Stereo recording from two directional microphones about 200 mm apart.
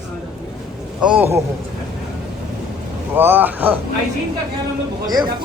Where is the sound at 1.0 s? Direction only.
5° right (ahead or behind).